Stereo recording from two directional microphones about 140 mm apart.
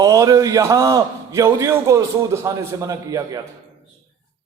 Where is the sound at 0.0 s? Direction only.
25° right (ahead or behind).